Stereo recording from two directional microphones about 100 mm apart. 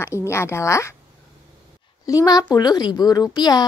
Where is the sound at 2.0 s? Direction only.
35° left (ahead or behind).